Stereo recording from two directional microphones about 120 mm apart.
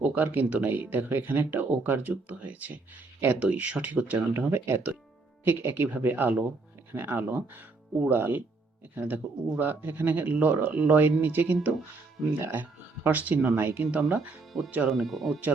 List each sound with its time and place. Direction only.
0.0 s speech: 15° right (ahead or behind)
14.8 s speech: centre (ahead or behind)